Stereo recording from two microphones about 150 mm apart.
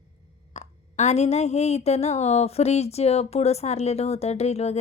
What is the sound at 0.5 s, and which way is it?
Speech, 50° left (ahead or behind).